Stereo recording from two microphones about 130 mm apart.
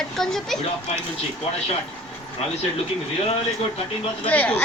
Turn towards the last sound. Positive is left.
turn(degrees=10)  # may be behind; listen again after turning